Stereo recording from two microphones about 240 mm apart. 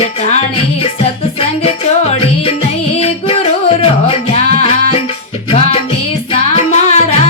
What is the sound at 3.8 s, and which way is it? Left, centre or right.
Music, left.